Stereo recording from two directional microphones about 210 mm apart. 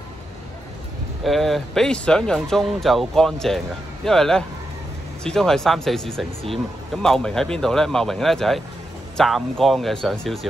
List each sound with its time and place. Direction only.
1.2 s speech: centre (ahead or behind)